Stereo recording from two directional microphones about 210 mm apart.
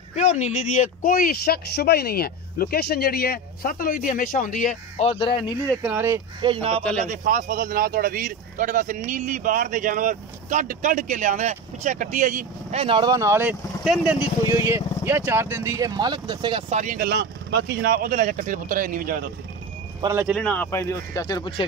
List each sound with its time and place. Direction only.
0.1 s speech: 35° left (ahead or behind)
5.8 s speech: 10° right (ahead or behind)
6.4 s speech: 25° right (ahead or behind)
7.0 s speech: 40° right (ahead or behind)
12.8 s speech: 20° right (ahead or behind); by 19.2 s 40° right (ahead or behind)
20.0 s speech: 10° right (ahead or behind)
20.3 s speech: 5° left (ahead or behind); by 21.6 s 20° left (ahead or behind)